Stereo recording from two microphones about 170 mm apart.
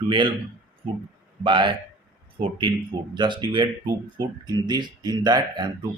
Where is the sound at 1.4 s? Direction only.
30° right (ahead or behind).